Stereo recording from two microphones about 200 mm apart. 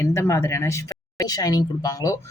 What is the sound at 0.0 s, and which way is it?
Speech, 15° left (ahead or behind).